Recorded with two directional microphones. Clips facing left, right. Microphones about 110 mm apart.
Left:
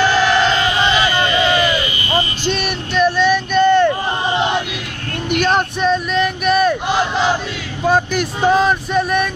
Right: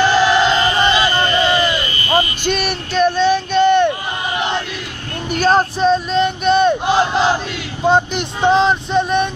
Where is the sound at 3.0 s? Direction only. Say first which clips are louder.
Right 1 dB; 25° right (ahead or behind).